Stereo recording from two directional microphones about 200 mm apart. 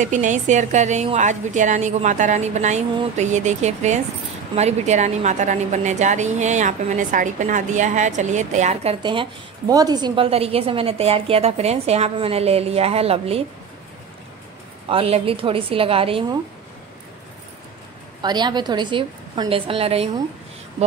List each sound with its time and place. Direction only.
0.0 s a woman's voice: 35° right (ahead or behind)
9.0 s a woman's voice: 25° right (ahead or behind)
14.9 s a woman's voice: 30° right (ahead or behind)
18.2 s a woman's voice: 20° right (ahead or behind)